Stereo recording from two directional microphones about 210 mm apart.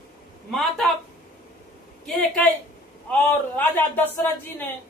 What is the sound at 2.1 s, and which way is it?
A man's voice, centre (ahead or behind).